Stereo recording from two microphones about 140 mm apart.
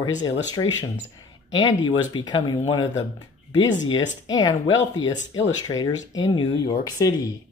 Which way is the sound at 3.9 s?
30° left (ahead or behind).